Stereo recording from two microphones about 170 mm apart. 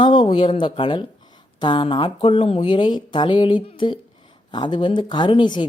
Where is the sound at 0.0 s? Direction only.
30° left (ahead or behind).